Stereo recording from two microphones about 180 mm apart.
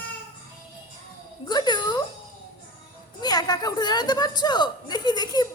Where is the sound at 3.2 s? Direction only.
20° left (ahead or behind).